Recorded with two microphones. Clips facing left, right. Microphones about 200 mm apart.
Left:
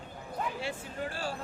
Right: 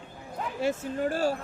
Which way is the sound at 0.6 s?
45° right (ahead or behind).